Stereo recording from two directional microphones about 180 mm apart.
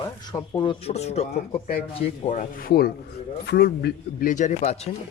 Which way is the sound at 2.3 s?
50° left (ahead or behind).